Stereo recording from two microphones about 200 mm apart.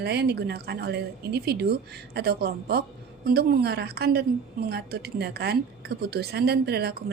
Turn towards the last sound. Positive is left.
turn(degrees=-55)  # may be behind; listen again after turning